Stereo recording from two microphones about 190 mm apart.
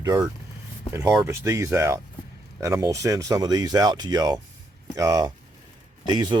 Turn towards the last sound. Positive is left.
turn(degrees=-20)  # may be behind; listen again after turning